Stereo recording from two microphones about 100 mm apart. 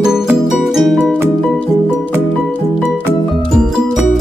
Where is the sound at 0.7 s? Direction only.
Centre (ahead or behind).